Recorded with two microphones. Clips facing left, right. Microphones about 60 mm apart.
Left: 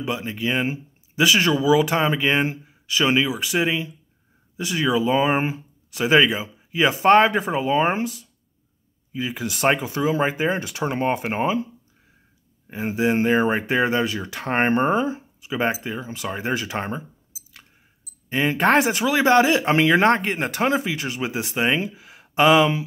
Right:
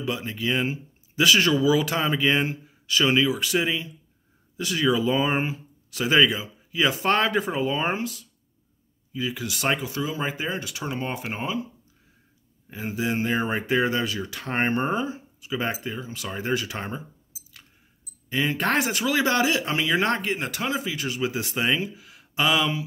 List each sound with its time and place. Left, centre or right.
0.0 s speech: left
12.6 s speech: left
16.6 s speech: left
18.3 s speech: left